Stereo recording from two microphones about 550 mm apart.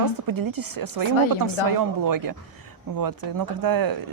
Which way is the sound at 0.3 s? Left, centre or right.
Right.